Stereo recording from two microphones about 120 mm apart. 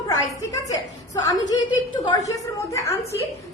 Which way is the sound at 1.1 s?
30° left (ahead or behind).